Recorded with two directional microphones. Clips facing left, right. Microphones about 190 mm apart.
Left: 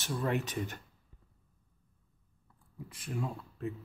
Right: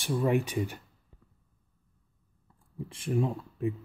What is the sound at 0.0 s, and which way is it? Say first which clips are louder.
Speech: right 6 dB; 15° right (ahead or behind).